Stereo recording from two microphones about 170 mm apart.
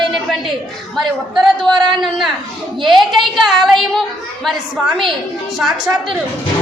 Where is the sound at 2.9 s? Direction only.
Centre (ahead or behind).